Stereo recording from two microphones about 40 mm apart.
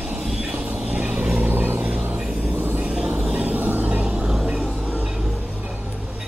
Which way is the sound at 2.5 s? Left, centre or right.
Right.